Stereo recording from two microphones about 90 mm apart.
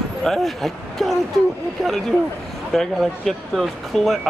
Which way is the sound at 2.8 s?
Centre (ahead or behind).